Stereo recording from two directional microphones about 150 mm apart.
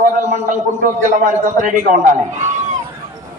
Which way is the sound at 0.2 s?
60° right (ahead or behind).